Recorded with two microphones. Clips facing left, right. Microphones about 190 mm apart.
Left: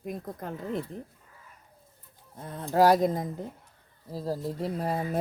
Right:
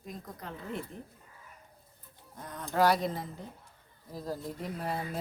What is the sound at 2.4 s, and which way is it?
Speech, 30° left (ahead or behind).